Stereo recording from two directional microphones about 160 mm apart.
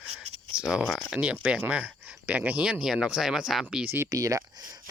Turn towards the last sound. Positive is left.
turn(degrees=-25)  # may be behind; listen again after turning